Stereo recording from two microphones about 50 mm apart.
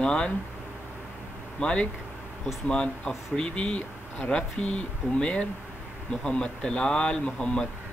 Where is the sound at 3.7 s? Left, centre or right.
Left.